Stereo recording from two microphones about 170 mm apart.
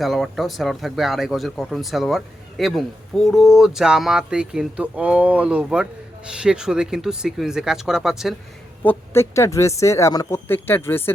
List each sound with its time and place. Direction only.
0.0 s speech: centre (ahead or behind)
8.8 s speech: 15° left (ahead or behind)